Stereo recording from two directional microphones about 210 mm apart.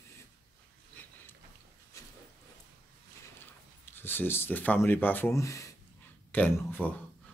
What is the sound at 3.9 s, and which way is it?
Speech, 10° left (ahead or behind).